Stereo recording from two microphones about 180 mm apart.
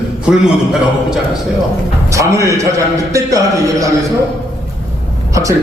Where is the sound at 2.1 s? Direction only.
15° right (ahead or behind).